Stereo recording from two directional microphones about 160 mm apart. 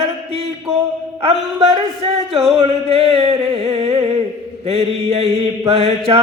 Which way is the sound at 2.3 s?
Centre (ahead or behind).